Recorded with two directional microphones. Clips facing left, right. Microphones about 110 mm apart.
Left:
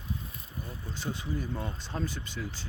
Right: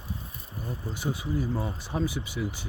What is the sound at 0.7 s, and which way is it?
Speech, 15° right (ahead or behind).